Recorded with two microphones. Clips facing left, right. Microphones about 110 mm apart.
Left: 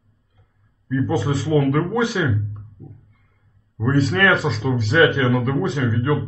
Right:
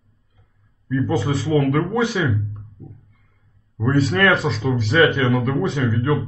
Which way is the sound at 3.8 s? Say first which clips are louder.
Even; 5° right (ahead or behind).